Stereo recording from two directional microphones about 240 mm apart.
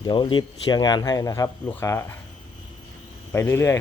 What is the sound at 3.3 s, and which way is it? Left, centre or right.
Speech, centre.